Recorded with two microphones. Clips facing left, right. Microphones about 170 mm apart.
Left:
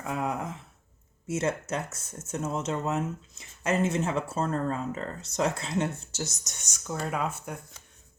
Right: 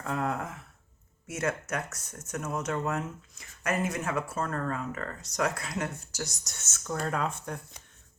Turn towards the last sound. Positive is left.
turn(degrees=10)  # may be behind; listen again after turning